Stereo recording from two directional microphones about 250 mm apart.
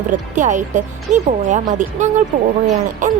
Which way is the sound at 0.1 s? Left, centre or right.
Right.